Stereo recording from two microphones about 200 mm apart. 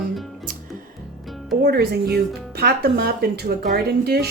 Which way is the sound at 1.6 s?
50° right (ahead or behind).